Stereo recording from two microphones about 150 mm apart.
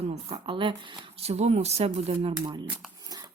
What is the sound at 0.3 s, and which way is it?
Speech, 35° right (ahead or behind).